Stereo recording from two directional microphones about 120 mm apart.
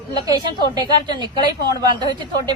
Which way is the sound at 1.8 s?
40° right (ahead or behind).